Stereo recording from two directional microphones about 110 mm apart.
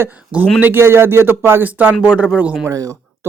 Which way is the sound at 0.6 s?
20° right (ahead or behind).